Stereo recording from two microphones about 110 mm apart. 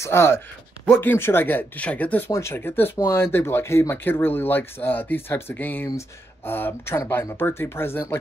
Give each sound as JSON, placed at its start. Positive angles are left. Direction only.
{"t": 0.0, "sound": "speech", "side_deg": 25}